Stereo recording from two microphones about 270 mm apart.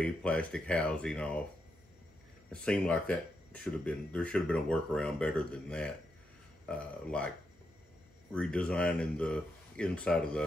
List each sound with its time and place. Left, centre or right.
0.0 s speech: centre
2.5 s speech: centre
8.3 s speech: centre